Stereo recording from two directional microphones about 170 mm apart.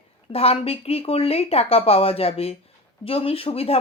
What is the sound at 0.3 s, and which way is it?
Speech, 35° left (ahead or behind).